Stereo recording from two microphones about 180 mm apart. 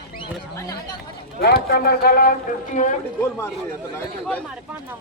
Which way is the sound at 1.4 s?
55° left (ahead or behind).